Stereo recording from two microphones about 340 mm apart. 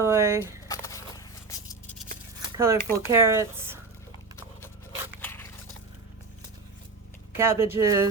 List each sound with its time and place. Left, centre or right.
0.0 s speech: centre
0.7 s a sound: centre
2.6 s speech: centre
5.2 s biting: centre
7.3 s speech: centre